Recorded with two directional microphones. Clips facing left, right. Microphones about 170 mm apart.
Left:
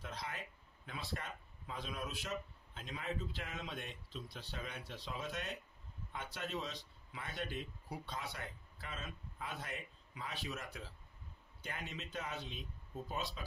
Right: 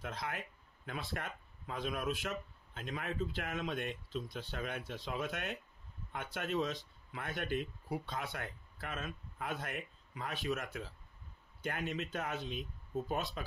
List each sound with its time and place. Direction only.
0.0 s speech: 55° right (ahead or behind)